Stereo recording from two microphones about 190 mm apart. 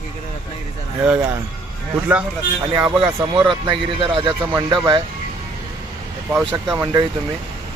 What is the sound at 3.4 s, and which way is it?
Speech, 25° right (ahead or behind).